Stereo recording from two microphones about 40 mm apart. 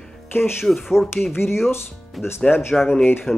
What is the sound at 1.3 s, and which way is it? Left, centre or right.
Speech, left.